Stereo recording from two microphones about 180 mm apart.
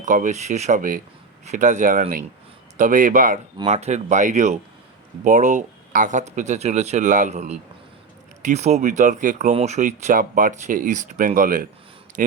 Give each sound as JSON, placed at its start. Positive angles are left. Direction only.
{"t": 0.0, "sound": "speech", "side_deg": -45}